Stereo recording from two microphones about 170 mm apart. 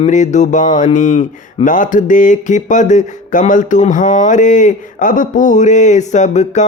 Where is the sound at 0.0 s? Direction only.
45° left (ahead or behind).